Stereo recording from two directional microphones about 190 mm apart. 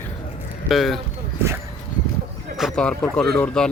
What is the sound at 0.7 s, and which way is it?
Speech, centre (ahead or behind).